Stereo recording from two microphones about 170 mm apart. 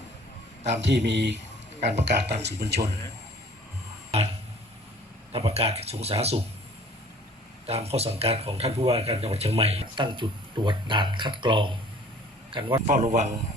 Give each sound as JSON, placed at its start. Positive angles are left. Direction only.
{"t": 0.6, "sound": "speech", "side_deg": -90}
{"t": 5.3, "sound": "speech", "side_deg": -35}
{"t": 7.7, "sound": "speech", "side_deg": -35}
{"t": 12.9, "sound": "speech", "side_deg": -45}